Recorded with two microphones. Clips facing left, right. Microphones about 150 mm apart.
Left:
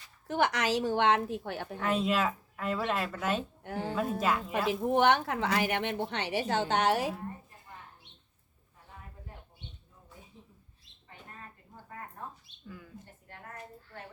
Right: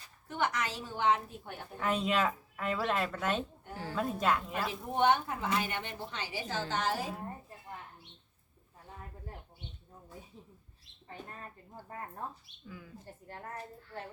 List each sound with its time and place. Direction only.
0.3 s a woman's voice: 85° left
1.8 s speech: centre (ahead or behind)
3.6 s a woman's voice: 80° left
4.2 s speech: centre (ahead or behind)
4.7 s a woman's voice: 80° left
12.6 s speech: centre (ahead or behind)